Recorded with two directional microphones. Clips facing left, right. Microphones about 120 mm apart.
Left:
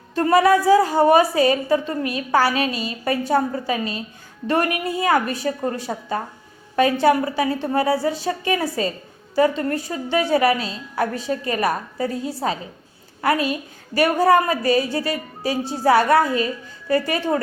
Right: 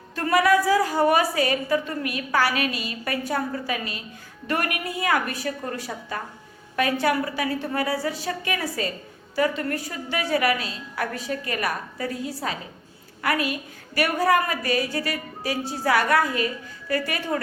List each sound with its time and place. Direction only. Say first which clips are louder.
0.1 s a woman's voice: left 4 dB; 30° left (ahead or behind)